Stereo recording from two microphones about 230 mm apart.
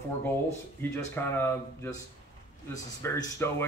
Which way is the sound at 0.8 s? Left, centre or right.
Centre.